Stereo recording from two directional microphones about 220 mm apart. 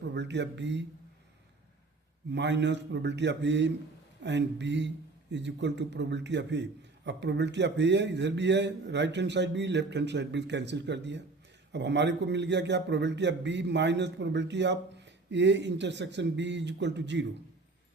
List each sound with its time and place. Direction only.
0.0 s a man's voice: 50° right (ahead or behind)
2.3 s a man's voice: 55° right (ahead or behind)